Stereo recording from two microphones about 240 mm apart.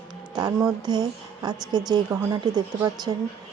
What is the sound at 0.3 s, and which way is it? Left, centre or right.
A woman's voice, centre.